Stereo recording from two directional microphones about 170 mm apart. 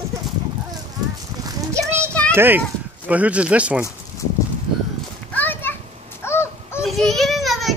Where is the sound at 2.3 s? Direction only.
10° right (ahead or behind).